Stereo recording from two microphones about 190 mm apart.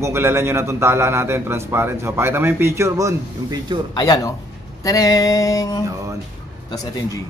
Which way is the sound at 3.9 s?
20° left (ahead or behind).